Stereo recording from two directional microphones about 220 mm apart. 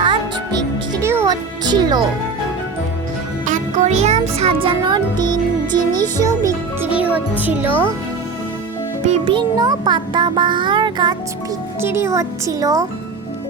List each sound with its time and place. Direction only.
0.0 s music: 20° right (ahead or behind)
3.4 s music: 35° right (ahead or behind); by 6.5 s 15° right (ahead or behind)
6.9 s speech: 5° right (ahead or behind)
9.0 s music: 25° right (ahead or behind)
11.8 s speech: 10° right (ahead or behind)